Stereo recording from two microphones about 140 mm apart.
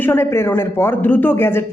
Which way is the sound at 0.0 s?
15° left (ahead or behind).